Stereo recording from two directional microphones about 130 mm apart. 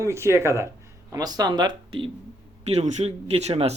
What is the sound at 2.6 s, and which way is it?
Speech, 55° right (ahead or behind).